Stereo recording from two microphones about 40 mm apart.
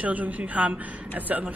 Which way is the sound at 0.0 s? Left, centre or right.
Right.